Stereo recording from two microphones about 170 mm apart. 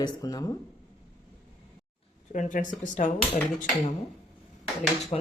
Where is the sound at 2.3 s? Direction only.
50° left (ahead or behind).